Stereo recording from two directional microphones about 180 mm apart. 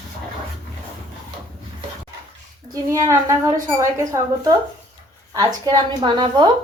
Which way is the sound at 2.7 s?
20° right (ahead or behind).